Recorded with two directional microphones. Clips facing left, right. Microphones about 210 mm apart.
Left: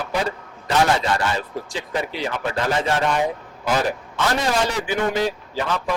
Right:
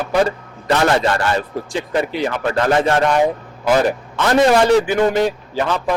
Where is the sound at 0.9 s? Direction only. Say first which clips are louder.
Right 5 dB; 60° right (ahead or behind).